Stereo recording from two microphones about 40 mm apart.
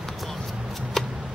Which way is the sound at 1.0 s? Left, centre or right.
Centre.